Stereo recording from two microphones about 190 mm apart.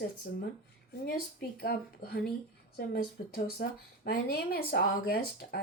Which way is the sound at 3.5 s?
55° left (ahead or behind).